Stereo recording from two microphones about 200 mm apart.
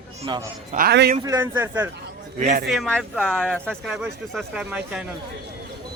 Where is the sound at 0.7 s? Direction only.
55° right (ahead or behind).